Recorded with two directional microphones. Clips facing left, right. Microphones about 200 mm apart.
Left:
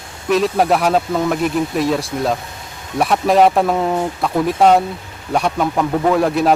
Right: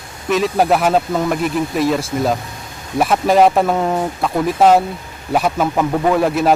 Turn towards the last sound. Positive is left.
turn(degrees=0)  # may be behind; listen again after turning